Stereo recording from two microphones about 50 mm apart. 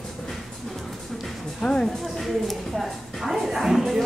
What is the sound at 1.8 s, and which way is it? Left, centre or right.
Speech, centre.